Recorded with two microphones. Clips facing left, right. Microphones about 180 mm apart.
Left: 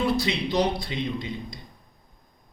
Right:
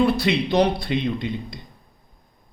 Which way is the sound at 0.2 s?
60° right (ahead or behind).